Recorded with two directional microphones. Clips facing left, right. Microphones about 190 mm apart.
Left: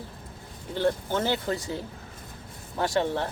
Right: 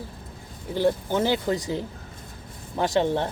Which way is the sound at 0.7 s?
15° right (ahead or behind).